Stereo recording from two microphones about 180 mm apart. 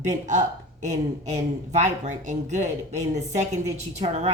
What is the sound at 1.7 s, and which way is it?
Speech, 40° right (ahead or behind).